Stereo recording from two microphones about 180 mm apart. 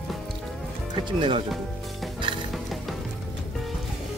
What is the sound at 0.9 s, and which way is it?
Speech, 25° right (ahead or behind).